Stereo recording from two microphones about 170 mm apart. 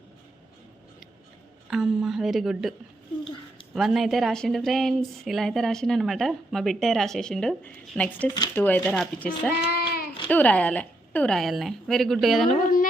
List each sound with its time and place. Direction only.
1.7 s speech: centre (ahead or behind)
3.8 s speech: centre (ahead or behind)
9.6 s child singing: 65° left (ahead or behind)
10.2 s speech: 10° left (ahead or behind)